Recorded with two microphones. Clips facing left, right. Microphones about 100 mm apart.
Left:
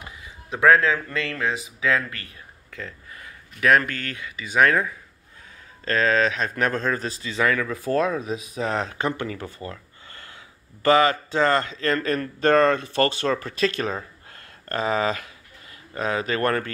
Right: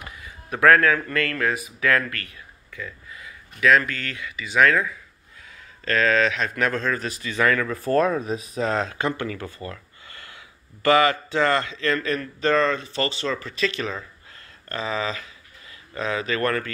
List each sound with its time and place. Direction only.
0.5 s speech: 15° left (ahead or behind)
3.1 s speech: 40° left (ahead or behind); by 7.6 s 20° left (ahead or behind)
7.6 s speech: 5° left (ahead or behind)
8.5 s speech: 15° left (ahead or behind); by 16.7 s 35° left (ahead or behind)